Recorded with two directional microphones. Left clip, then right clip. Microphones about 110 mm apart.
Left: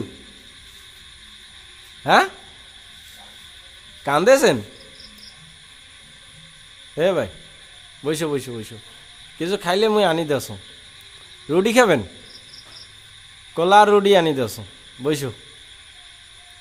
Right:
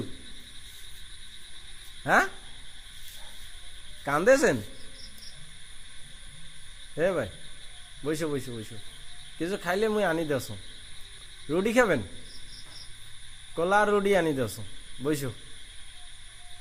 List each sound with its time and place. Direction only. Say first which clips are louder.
2.0 s speech: left 8 dB; 25° left (ahead or behind)
4.0 s speech: left 7 dB; 30° left (ahead or behind)
6.9 s speech: left 8 dB; 30° left (ahead or behind)
13.6 s speech: left 11 dB; 40° left (ahead or behind)